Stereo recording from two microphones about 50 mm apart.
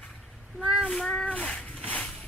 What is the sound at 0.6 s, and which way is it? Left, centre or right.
Child singing, centre.